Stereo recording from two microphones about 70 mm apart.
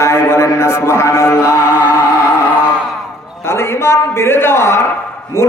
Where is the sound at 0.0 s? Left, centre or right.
Left.